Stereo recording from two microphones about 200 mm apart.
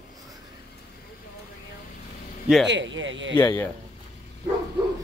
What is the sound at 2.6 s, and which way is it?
Speech, 65° right (ahead or behind).